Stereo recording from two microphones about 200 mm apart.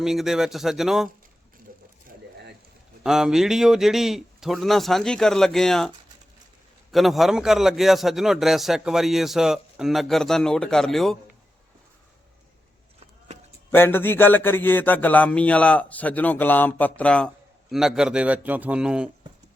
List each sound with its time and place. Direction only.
0.0 s a man's voice: centre (ahead or behind)
2.0 s a sound: 55° right (ahead or behind)
3.0 s a man's voice: centre (ahead or behind)
6.9 s a man's voice: centre (ahead or behind)
13.0 s vehicle: 35° right (ahead or behind)
13.7 s a sound: 10° left (ahead or behind)